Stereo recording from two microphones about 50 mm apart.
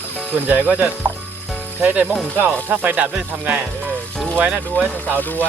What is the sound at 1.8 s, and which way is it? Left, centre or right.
Music, right.